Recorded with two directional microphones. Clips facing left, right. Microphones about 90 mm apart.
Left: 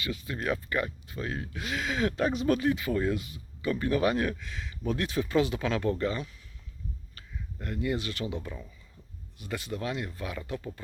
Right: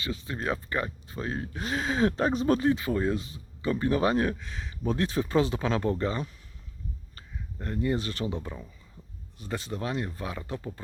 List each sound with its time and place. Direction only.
0.0 s speech: 30° right (ahead or behind)